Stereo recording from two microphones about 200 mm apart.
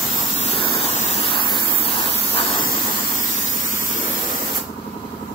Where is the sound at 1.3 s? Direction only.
25° left (ahead or behind).